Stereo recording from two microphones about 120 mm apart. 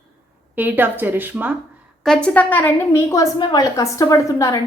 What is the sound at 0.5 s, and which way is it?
Speech, 15° right (ahead or behind).